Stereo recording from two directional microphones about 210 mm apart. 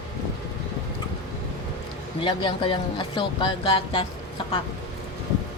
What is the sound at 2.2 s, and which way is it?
Speech, 25° left (ahead or behind).